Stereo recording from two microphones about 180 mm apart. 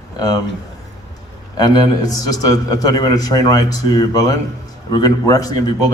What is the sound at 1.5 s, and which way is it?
A man's voice, 20° left (ahead or behind).